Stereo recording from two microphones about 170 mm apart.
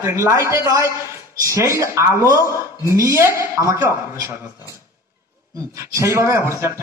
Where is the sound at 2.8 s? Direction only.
15° right (ahead or behind).